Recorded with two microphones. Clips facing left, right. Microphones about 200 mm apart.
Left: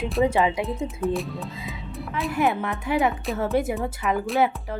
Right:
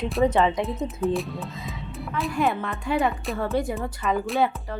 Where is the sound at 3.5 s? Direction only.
20° left (ahead or behind).